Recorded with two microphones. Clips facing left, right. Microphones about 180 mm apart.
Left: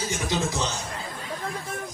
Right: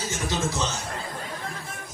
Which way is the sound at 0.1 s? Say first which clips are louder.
Even; 15° left (ahead or behind).